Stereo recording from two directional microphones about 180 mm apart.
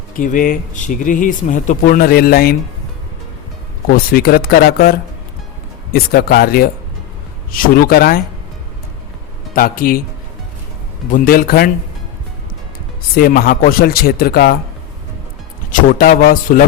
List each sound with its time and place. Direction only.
0.2 s speech: 50° left (ahead or behind)
3.8 s speech: 55° left (ahead or behind)
9.6 s speech: 55° left (ahead or behind)
11.1 s speech: 55° left (ahead or behind)
13.1 s speech: 55° left (ahead or behind)
15.7 s speech: 50° left (ahead or behind)